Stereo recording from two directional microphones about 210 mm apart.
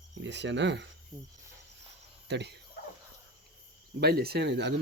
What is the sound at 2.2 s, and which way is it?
Speech, 55° right (ahead or behind).